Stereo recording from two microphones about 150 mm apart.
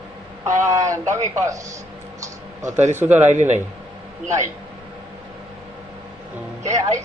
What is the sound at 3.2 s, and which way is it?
Speech, 50° right (ahead or behind).